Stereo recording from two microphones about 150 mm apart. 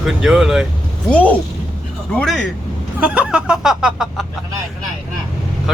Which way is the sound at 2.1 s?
Centre (ahead or behind).